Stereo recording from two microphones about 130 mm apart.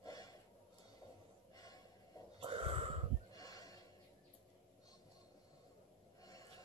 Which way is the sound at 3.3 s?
30° left (ahead or behind).